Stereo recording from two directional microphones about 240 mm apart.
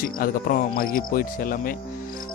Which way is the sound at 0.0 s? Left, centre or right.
Left.